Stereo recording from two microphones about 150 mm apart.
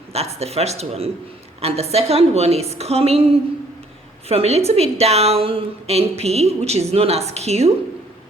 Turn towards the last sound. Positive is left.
turn(degrees=-45)  # may be behind; listen again after turning